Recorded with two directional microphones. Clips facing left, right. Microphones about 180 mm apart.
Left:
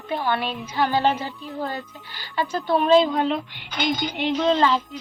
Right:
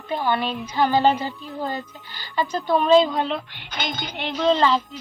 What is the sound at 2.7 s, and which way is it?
Speech, 5° left (ahead or behind).